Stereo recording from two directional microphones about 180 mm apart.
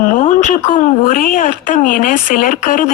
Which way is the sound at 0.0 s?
45° left (ahead or behind).